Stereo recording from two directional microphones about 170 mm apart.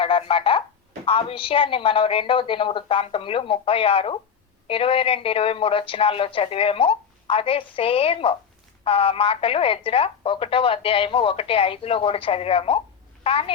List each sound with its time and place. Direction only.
0.0 s speech: 30° left (ahead or behind)